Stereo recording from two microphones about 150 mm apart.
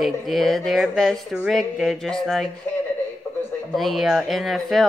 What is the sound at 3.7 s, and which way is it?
Speech, centre (ahead or behind).